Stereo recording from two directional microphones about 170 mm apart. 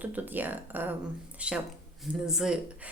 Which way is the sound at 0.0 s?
10° right (ahead or behind).